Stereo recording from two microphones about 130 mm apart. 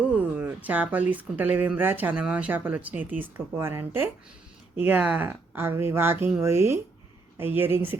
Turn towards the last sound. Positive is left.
turn(degrees=-15)  # may be behind; listen again after turning